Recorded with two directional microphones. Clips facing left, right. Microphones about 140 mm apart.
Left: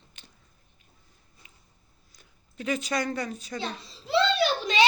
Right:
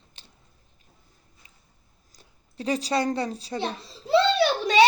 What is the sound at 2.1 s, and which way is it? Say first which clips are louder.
Speech: right 3 dB; 35° right (ahead or behind).